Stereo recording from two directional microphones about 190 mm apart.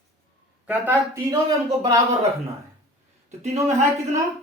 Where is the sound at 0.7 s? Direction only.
10° right (ahead or behind).